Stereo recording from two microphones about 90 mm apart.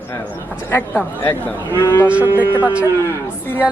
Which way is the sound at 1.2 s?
25° left (ahead or behind).